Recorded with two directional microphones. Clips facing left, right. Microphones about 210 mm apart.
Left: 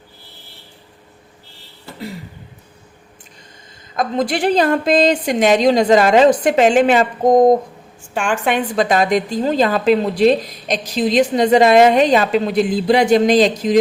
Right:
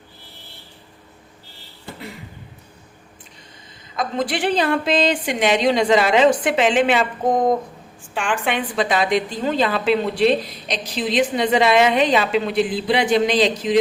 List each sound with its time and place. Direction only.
3.9 s a woman's voice: 40° left (ahead or behind)